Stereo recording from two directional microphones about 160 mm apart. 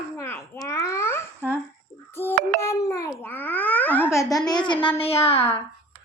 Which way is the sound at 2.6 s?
20° left (ahead or behind).